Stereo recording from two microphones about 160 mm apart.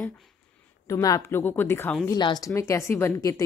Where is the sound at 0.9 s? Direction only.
20° left (ahead or behind).